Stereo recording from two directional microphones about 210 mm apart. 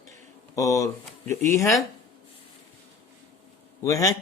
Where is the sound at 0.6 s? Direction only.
15° left (ahead or behind).